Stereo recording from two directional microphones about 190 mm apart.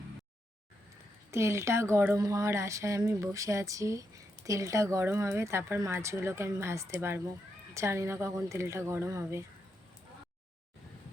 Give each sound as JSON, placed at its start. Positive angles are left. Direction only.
{"t": 1.3, "sound": "speech", "side_deg": -15}